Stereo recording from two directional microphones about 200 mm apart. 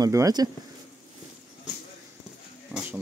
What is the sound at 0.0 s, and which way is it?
Speech, 15° right (ahead or behind).